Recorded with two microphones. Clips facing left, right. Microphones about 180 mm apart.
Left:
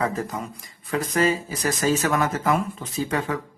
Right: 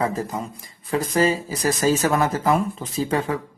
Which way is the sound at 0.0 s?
30° right (ahead or behind).